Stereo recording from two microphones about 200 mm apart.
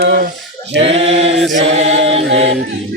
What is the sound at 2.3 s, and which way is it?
A capella, 70° right (ahead or behind).